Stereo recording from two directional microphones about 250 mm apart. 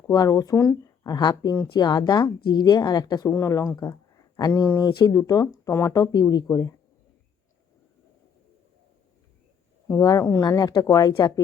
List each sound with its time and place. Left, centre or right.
0.1 s speech: centre
9.9 s speech: centre